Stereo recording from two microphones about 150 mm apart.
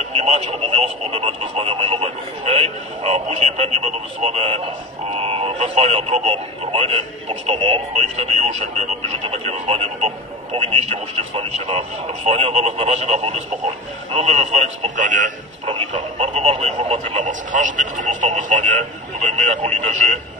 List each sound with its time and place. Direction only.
0.1 s speech: 45° right (ahead or behind)
15.6 s speech: 35° right (ahead or behind); by 20.2 s 50° right (ahead or behind)